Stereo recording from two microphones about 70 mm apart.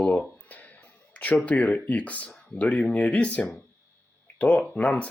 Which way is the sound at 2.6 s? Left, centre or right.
Centre.